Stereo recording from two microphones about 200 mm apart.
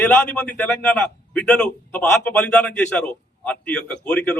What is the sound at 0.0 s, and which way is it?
A man's voice, 5° left (ahead or behind).